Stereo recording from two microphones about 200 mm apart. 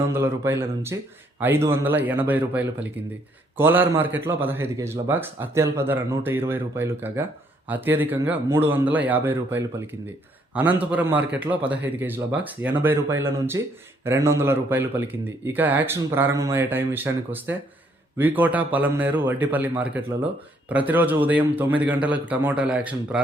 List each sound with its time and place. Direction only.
0.0 s a man's voice: 10° right (ahead or behind)